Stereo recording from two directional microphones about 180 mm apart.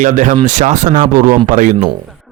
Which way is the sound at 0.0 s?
45° right (ahead or behind).